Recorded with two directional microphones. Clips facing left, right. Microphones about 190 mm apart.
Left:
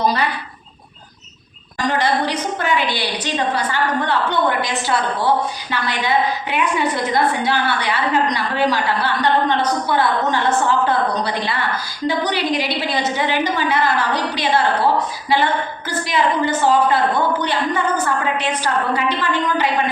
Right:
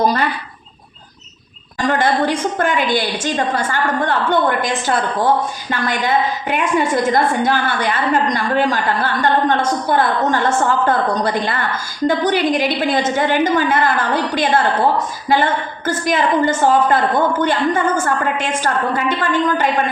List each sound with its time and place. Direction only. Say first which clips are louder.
1.9 s a woman's voice: right 3 dB; 50° right (ahead or behind)